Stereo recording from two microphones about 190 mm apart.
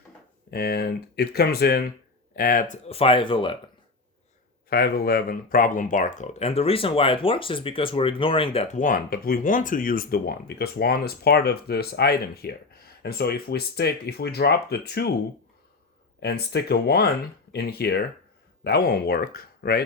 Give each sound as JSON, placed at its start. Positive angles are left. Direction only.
{"t": 0.5, "sound": "speech", "side_deg": 55}
{"t": 4.7, "sound": "speech", "side_deg": 55}
{"t": 16.2, "sound": "speech", "side_deg": 60}